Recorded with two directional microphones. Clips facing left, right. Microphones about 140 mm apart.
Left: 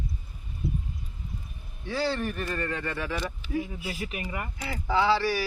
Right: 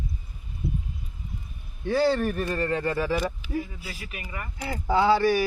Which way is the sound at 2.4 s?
35° right (ahead or behind).